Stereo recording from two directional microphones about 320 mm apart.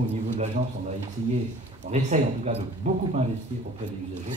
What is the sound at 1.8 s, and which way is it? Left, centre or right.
Speech, right.